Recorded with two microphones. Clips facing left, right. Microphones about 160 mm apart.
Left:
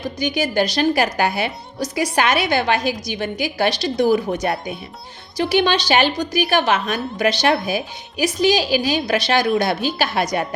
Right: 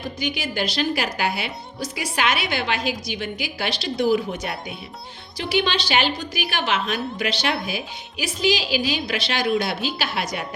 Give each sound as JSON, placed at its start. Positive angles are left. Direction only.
{"t": 0.2, "sound": "a woman's voice", "side_deg": 45}